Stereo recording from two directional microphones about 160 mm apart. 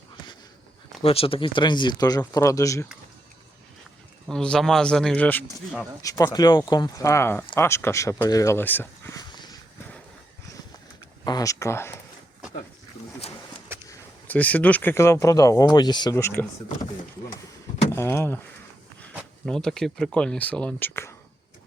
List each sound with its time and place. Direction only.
1.0 s speech: 35° left (ahead or behind); by 2.8 s 20° left (ahead or behind)
4.3 s speech: 5° left (ahead or behind)
6.0 s speech: 20° left (ahead or behind)
9.3 s a sound: 25° left (ahead or behind)
11.2 s speech: 25° left (ahead or behind)
13.8 s speech: 10° left (ahead or behind)
17.9 s speech: 15° left (ahead or behind)
19.5 s speech: 5° left (ahead or behind)